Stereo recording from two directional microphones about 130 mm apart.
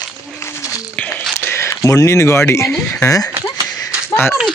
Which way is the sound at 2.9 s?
20° left (ahead or behind).